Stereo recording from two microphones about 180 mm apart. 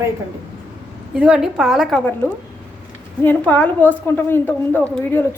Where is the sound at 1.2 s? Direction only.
5° right (ahead or behind).